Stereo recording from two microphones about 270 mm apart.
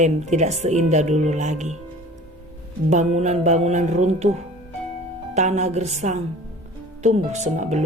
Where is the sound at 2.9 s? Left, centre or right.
Right.